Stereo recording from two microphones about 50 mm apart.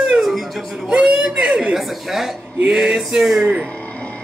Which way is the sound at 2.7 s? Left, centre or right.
Centre.